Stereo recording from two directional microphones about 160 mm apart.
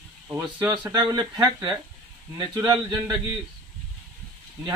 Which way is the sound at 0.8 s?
25° right (ahead or behind).